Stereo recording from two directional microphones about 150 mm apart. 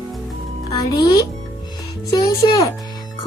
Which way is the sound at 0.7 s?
25° left (ahead or behind).